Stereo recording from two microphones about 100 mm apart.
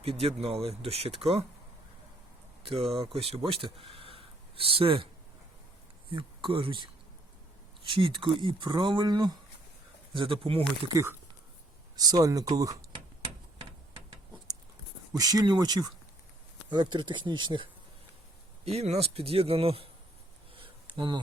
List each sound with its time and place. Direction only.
0.0 s speech: 70° right (ahead or behind)
2.9 s speech: 70° right (ahead or behind)
6.1 s speech: 60° right (ahead or behind)
10.2 s speech: 65° right (ahead or behind)
10.9 s speech: 25° right (ahead or behind)
11.9 s speech: 40° right (ahead or behind)
15.1 s speech: 40° right (ahead or behind)
16.6 s speech: 50° right (ahead or behind)
18.6 s speech: 90° right
20.6 s a sound: 55° right (ahead or behind)